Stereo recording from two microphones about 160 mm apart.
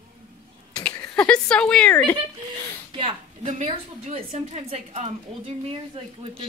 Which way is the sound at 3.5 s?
40° right (ahead or behind).